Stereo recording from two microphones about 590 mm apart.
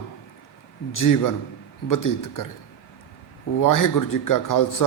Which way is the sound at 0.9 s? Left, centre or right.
Left.